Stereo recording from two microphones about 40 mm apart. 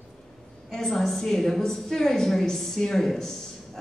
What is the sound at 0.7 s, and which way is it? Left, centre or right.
A woman's voice, centre.